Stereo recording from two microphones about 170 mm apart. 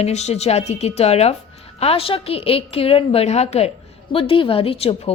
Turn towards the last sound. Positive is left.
turn(degrees=35)  # may be behind; listen again after turning